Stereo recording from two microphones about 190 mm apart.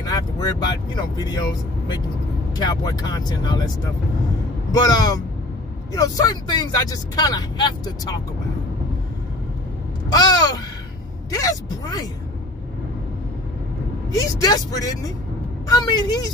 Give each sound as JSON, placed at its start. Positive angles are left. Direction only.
{"t": 0.0, "sound": "speech", "side_deg": 20}
{"t": 4.7, "sound": "speech", "side_deg": 20}
{"t": 10.0, "sound": "a sound", "side_deg": 20}
{"t": 14.1, "sound": "speech", "side_deg": 20}
{"t": 15.7, "sound": "speech", "side_deg": 20}